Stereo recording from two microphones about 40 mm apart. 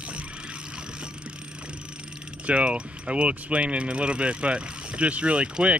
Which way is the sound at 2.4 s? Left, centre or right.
Right.